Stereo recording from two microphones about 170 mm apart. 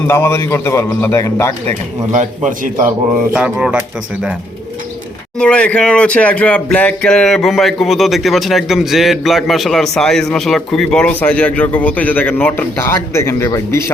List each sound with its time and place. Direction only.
0.1 s a man's voice: 15° left (ahead or behind)
2.1 s a man's voice: 50° right (ahead or behind)
3.3 s speech: 5° right (ahead or behind)
5.4 s speech: 5° left (ahead or behind)